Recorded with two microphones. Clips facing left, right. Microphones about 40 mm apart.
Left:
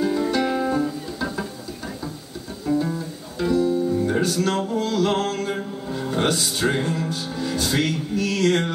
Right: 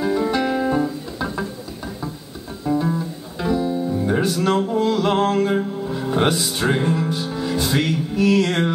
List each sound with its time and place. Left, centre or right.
0.0 s music: centre
2.6 s music: centre